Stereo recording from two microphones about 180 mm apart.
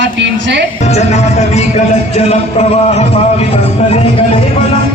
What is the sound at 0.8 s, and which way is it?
Music, 35° left (ahead or behind).